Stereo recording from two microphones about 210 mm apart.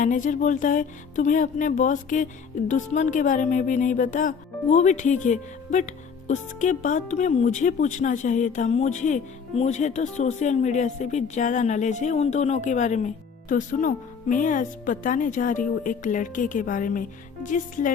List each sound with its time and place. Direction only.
0.0 s a woman's voice: 40° left (ahead or behind)